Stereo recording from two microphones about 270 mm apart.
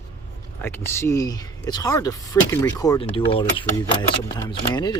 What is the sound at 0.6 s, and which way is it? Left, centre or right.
Speech, centre.